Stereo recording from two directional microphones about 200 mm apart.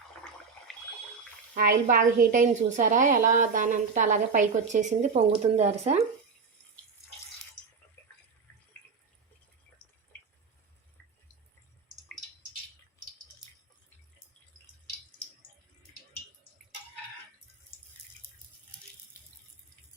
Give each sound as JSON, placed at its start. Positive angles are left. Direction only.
{"t": 1.5, "sound": "a woman's voice", "side_deg": -45}